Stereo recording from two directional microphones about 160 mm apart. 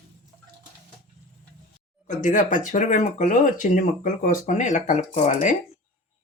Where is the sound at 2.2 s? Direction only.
55° left (ahead or behind).